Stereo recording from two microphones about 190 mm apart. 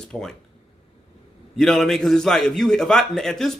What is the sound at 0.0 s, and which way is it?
Speech, centre (ahead or behind).